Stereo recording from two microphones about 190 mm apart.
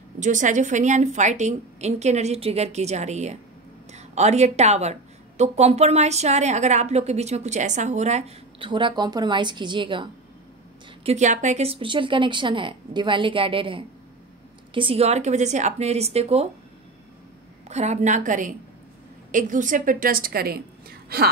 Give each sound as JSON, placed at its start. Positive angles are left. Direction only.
{"t": 0.2, "sound": "a woman's voice", "side_deg": -40}
{"t": 11.1, "sound": "a woman's voice", "side_deg": -40}
{"t": 17.6, "sound": "a woman's voice", "side_deg": -35}